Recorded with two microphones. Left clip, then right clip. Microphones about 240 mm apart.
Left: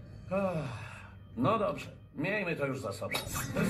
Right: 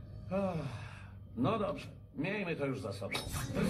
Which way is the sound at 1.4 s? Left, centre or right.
Left.